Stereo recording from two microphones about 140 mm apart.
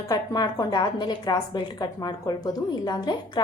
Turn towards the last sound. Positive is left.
turn(degrees=30)  # may be behind; listen again after turning